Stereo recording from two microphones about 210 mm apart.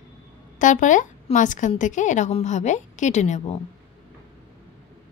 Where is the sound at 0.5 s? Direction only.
35° left (ahead or behind).